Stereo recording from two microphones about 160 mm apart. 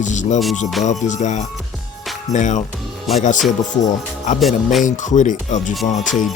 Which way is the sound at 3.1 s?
Centre (ahead or behind).